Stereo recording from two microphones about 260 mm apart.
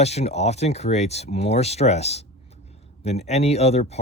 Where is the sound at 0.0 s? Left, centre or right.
Left.